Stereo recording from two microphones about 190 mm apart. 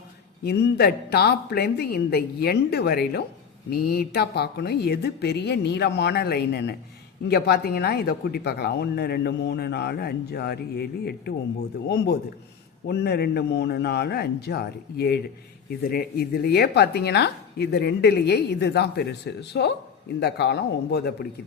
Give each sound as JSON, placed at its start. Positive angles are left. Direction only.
{"t": 0.4, "sound": "a woman's voice", "side_deg": 60}